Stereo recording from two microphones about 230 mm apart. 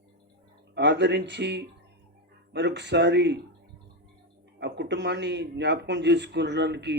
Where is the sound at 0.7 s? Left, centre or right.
Right.